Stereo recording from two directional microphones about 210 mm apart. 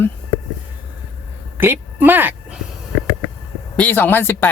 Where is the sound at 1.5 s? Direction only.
10° right (ahead or behind).